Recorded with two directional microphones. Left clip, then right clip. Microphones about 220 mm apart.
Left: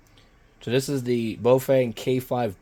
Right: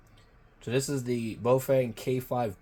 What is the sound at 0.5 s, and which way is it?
Speech, 50° left (ahead or behind).